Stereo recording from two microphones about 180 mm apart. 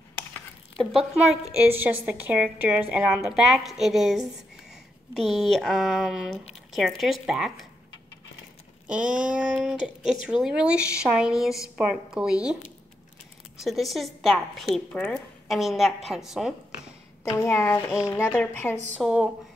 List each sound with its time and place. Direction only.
0.3 s a woman's voice: centre (ahead or behind)
8.8 s a woman's voice: 5° right (ahead or behind)
13.6 s a woman's voice: centre (ahead or behind)
17.2 s a woman's voice: 15° left (ahead or behind)
18.9 s a woman's voice: 5° right (ahead or behind)